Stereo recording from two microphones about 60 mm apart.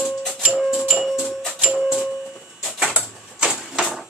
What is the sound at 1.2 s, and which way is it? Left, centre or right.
Music, centre.